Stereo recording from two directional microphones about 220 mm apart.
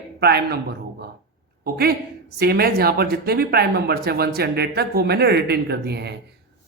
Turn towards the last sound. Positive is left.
turn(degrees=-50)  # may be behind; listen again after turning